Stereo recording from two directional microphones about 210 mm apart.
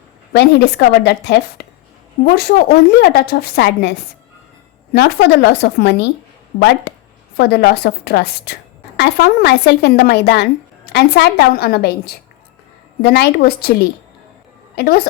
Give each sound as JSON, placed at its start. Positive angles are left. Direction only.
{"t": 0.3, "sound": "a woman's voice", "side_deg": 50}
{"t": 4.9, "sound": "a woman's voice", "side_deg": 50}
{"t": 6.9, "sound": "a sound", "side_deg": 55}
{"t": 7.3, "sound": "a woman's voice", "side_deg": 50}